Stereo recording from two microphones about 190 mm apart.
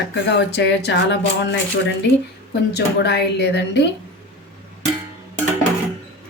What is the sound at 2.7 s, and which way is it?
Speech, 60° left (ahead or behind).